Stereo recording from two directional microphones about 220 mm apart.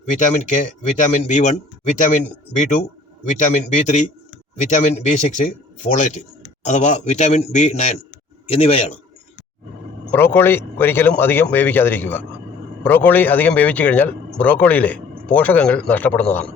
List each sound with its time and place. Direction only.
0.3 s speech: 35° left (ahead or behind)
10.1 s a man's voice: 10° left (ahead or behind)